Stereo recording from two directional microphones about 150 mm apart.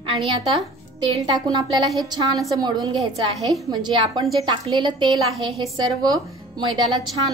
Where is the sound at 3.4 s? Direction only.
Centre (ahead or behind).